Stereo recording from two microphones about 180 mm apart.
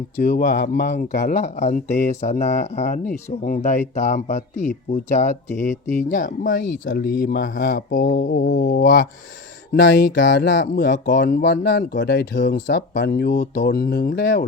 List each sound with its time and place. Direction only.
0.2 s speech: 50° left (ahead or behind)
0.5 s speech: 70° left (ahead or behind)
1.1 s speech: 40° left (ahead or behind)
6.9 s mantra: 55° left (ahead or behind); by 8.8 s 75° left (ahead or behind)
8.8 s mantra: 55° left (ahead or behind)
9.7 s speech: 70° left (ahead or behind)
11.2 s speech: 60° left (ahead or behind)